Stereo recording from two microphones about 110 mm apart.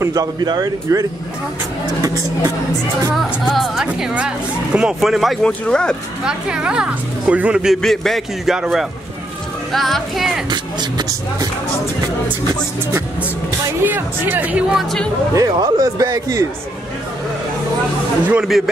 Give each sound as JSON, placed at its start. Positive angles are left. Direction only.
{"t": 0.0, "sound": "speech", "side_deg": -35}
{"t": 3.2, "sound": "speech", "side_deg": 0}
{"t": 3.8, "sound": "a woman's voice", "side_deg": -10}
{"t": 5.4, "sound": "speech", "side_deg": 10}
{"t": 6.2, "sound": "a woman's voice", "side_deg": -10}
{"t": 10.5, "sound": "speech", "side_deg": -40}
{"t": 13.8, "sound": "a woman's voice", "side_deg": -15}
{"t": 15.3, "sound": "speech", "side_deg": -35}
{"t": 18.2, "sound": "a woman's voice", "side_deg": -15}